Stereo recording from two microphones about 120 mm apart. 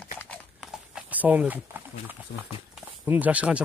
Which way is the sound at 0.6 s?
5° right (ahead or behind).